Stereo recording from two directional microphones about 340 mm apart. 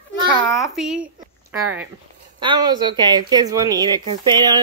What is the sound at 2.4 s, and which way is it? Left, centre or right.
Speech, centre.